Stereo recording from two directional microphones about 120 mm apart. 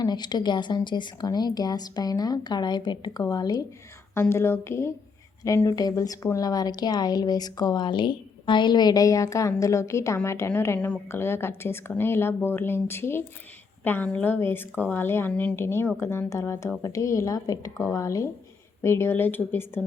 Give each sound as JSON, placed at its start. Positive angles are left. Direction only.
{"t": 0.0, "sound": "a woman's voice", "side_deg": 35}
{"t": 4.1, "sound": "a woman's voice", "side_deg": 20}